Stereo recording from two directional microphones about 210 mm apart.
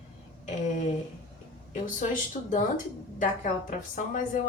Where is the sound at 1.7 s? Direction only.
40° left (ahead or behind).